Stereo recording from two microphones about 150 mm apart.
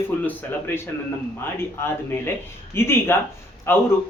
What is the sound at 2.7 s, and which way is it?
Speech, 15° left (ahead or behind).